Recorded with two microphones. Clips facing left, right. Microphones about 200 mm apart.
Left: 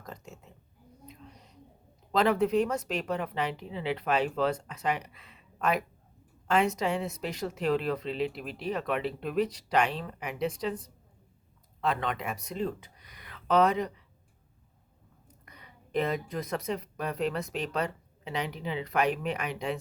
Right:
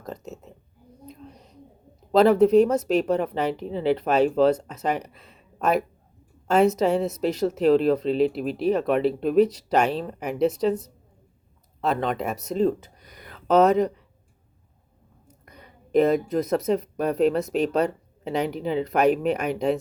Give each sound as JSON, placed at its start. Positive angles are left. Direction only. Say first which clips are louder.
{"t": 0.0, "sound": "a sound", "louder": "right 9 dB", "side_deg": -40}
{"t": 2.1, "sound": "speech", "louder": "right 9 dB", "side_deg": -40}
{"t": 15.4, "sound": "speech", "louder": "right 6 dB", "side_deg": -40}